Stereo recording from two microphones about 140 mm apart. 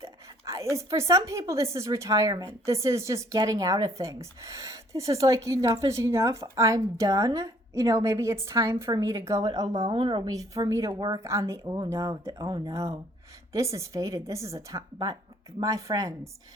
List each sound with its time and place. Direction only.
0.0 s a woman's voice: 20° right (ahead or behind)